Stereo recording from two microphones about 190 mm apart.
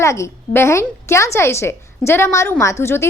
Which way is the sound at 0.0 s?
15° left (ahead or behind).